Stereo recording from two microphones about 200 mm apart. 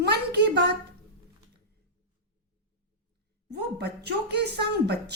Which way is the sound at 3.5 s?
55° right (ahead or behind).